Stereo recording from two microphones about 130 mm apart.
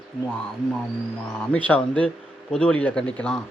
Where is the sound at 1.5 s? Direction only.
10° left (ahead or behind).